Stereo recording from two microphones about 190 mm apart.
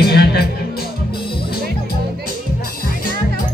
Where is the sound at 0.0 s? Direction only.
55° left (ahead or behind).